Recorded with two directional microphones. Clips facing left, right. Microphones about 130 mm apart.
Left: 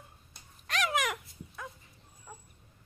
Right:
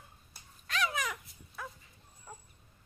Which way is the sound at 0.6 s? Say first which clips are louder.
Left 3 dB; 75° left (ahead or behind).